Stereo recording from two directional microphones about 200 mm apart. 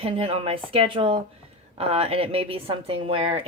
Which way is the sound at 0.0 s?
30° right (ahead or behind).